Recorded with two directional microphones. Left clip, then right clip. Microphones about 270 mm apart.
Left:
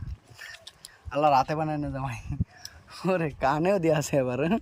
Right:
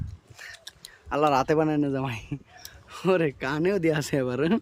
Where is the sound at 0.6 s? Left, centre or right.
Centre.